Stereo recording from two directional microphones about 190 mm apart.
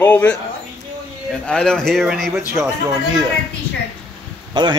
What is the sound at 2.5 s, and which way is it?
Speech, 15° right (ahead or behind).